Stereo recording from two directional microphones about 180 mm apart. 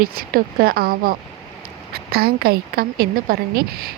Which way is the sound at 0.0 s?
55° right (ahead or behind).